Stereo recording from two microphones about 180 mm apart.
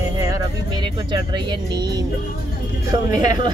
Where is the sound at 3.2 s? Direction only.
20° right (ahead or behind).